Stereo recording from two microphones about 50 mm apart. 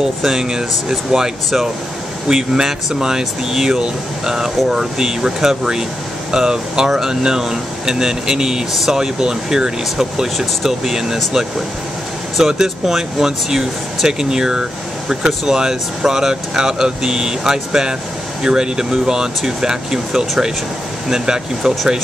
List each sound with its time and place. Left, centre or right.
0.0 s speech: centre
12.4 s speech: centre